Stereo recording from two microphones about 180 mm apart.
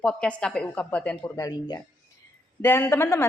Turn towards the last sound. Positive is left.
turn(degrees=15)  # may be behind; listen again after turning